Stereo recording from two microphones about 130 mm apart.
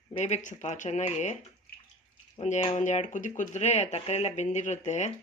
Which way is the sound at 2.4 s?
60° left (ahead or behind).